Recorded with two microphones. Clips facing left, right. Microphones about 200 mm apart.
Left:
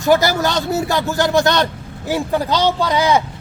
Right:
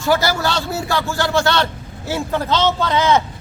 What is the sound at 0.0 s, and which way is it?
Speech, 15° left (ahead or behind).